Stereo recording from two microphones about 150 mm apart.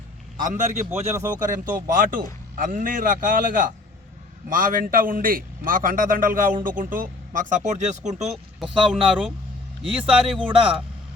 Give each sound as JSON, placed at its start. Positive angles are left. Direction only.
{"t": 0.3, "sound": "a man's voice", "side_deg": -55}
{"t": 1.1, "sound": "speech", "side_deg": -20}
{"t": 1.5, "sound": "a man's voice", "side_deg": -65}
{"t": 8.6, "sound": "a man's voice", "side_deg": -35}
{"t": 9.8, "sound": "speech", "side_deg": -5}
{"t": 10.3, "sound": "a man's voice", "side_deg": -35}